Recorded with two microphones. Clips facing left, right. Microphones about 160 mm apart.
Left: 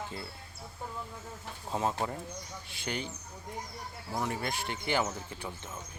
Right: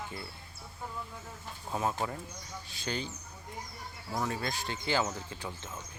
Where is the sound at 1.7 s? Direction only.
20° left (ahead or behind).